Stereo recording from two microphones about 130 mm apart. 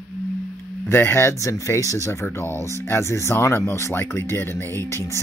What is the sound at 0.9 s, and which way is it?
Speech, 20° left (ahead or behind).